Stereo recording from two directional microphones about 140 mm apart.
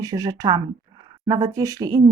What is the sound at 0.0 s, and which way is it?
Speech, 25° right (ahead or behind).